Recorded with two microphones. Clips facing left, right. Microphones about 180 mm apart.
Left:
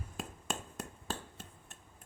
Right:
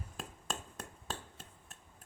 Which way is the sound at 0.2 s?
5° left (ahead or behind).